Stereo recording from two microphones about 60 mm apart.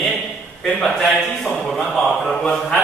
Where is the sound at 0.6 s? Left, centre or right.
Centre.